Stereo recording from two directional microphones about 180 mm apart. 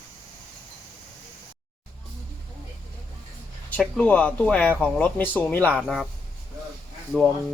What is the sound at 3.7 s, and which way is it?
Speech, 5° left (ahead or behind).